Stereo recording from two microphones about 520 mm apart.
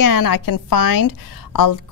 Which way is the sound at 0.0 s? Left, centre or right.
Left.